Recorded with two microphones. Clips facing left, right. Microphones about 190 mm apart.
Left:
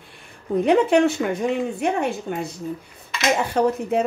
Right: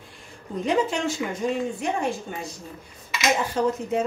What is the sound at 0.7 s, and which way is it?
Speech, 60° left (ahead or behind).